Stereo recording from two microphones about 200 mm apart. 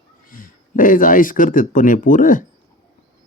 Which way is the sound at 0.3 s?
45° left (ahead or behind).